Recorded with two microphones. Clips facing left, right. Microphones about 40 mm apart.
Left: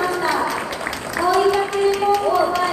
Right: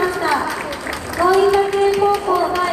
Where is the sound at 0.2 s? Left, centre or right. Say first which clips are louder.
Right 2 dB; centre.